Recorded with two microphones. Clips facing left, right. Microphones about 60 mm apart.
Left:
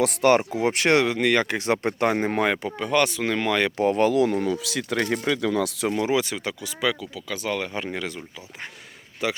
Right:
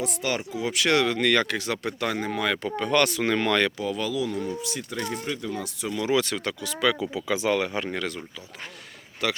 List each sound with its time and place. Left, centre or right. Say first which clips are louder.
0.0 s speech: left 10 dB; left
1.0 s speech: left 1 dB; centre; by 2.6 s left
2.6 s speech: even; centre
3.8 s speech: left 8 dB; left
4.5 s speech: left 6 dB; left
5.9 s speech: right 1 dB; left
6.1 s speech: even; centre
7.0 s speech: right 5 dB; right
7.5 s speech: right 2 dB; centre
9.2 s speech: left 1 dB; centre